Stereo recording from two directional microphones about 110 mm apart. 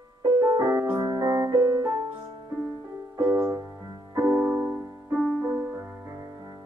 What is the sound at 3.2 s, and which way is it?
Music, 20° right (ahead or behind).